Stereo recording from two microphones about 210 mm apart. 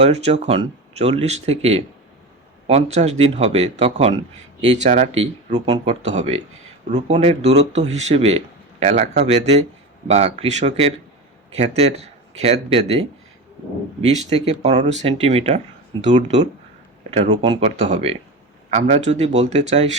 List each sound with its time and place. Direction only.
0.0 s speech: 30° right (ahead or behind)
14.0 s speech: 30° right (ahead or behind)